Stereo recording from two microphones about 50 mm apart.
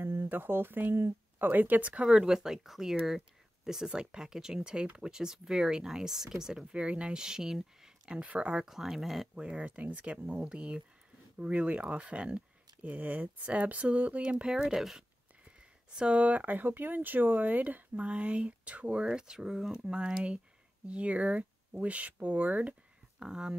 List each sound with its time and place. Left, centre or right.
0.0 s a sound: right
0.3 s speech: right; by 6.7 s centre
6.7 s speech: right
7.8 s a sound: centre
8.2 s speech: right
8.6 s speech: centre
9.3 s speech: centre
14.2 s speech: centre
15.9 s speech: right
19.0 s speech: centre; by 22.8 s right
23.1 s speech: centre